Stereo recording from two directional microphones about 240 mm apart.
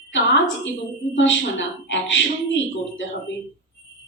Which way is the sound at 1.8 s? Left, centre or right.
Left.